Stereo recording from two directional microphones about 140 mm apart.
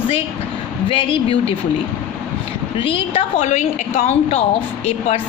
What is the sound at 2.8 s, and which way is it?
A woman's voice, 40° left (ahead or behind).